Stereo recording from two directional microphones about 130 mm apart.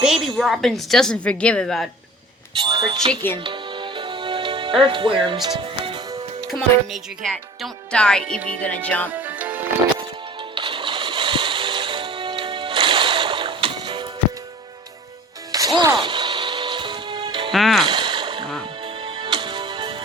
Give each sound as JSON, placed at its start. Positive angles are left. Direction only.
{"t": 0.0, "sound": "a woman's voice", "side_deg": 0}
{"t": 2.6, "sound": "speech", "side_deg": -40}
{"t": 3.3, "sound": "music", "side_deg": -40}
{"t": 6.5, "sound": "speech", "side_deg": 0}
{"t": 8.6, "sound": "music", "side_deg": 10}
{"t": 9.1, "sound": "music", "side_deg": -10}
{"t": 10.5, "sound": "music", "side_deg": -40}
{"t": 15.7, "sound": "music", "side_deg": -35}
{"t": 17.5, "sound": "music", "side_deg": 0}
{"t": 17.8, "sound": "a sound", "side_deg": -35}
{"t": 19.0, "sound": "music", "side_deg": -40}